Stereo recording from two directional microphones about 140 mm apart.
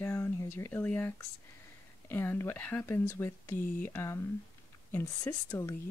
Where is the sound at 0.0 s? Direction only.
15° left (ahead or behind).